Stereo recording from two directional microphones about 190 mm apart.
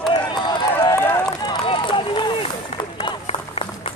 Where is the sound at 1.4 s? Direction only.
25° left (ahead or behind).